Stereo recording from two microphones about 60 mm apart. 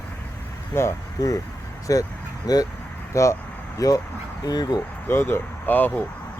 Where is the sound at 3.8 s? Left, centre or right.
Left.